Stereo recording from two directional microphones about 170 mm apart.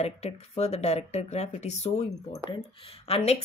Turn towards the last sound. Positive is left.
turn(degrees=35)  # may be behind; listen again after turning